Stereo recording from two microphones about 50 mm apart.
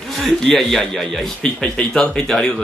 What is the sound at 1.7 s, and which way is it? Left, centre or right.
Speech, centre.